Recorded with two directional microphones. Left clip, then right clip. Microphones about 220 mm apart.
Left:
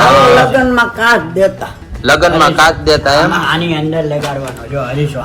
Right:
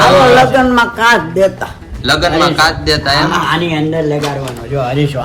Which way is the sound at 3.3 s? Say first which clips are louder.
Even; 40° right (ahead or behind).